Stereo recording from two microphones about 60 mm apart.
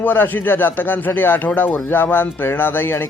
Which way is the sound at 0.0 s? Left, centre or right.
Left.